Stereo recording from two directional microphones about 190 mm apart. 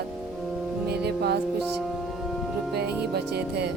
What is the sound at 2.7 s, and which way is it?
Speech, 60° right (ahead or behind).